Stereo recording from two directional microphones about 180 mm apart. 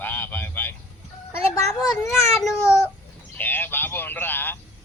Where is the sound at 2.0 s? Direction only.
15° left (ahead or behind).